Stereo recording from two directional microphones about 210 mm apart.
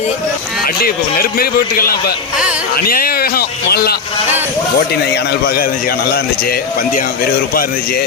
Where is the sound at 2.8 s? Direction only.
45° left (ahead or behind).